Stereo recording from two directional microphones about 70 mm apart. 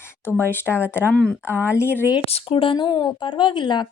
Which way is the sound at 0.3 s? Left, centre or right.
Left.